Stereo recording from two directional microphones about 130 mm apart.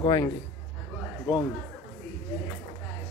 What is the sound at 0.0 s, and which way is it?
Speech, 30° left (ahead or behind).